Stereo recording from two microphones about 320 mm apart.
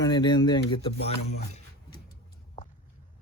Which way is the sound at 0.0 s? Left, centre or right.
Centre.